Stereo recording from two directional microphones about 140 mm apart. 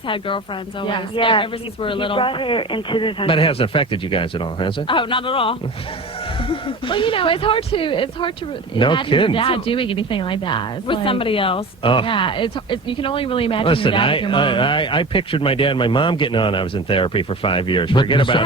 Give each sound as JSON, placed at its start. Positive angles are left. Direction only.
{"t": 0.9, "sound": "speech", "side_deg": 35}